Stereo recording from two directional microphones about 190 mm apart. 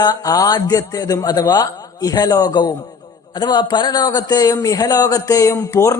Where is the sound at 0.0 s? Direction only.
20° left (ahead or behind).